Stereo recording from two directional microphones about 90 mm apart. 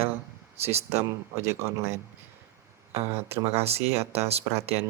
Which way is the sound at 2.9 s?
35° right (ahead or behind).